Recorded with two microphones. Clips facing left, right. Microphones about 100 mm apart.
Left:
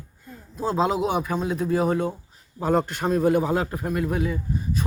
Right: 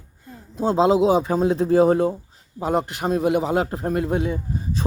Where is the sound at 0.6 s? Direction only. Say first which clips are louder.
Right 6 dB; 30° right (ahead or behind).